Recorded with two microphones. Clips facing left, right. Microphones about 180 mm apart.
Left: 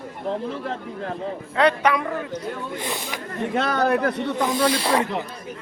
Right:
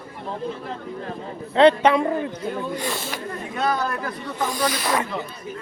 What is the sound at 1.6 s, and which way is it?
Speech, 25° right (ahead or behind).